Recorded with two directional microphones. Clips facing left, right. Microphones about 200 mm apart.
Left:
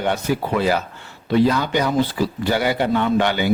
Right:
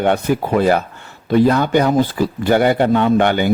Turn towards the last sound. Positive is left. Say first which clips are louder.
# right 4 dB
turn(degrees=-50)  # may be behind; listen again after turning